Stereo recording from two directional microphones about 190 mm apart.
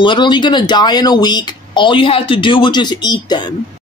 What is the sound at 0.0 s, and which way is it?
Speech, 25° left (ahead or behind).